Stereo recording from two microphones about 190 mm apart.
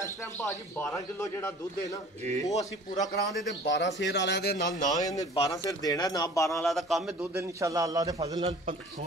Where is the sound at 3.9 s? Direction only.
65° left (ahead or behind).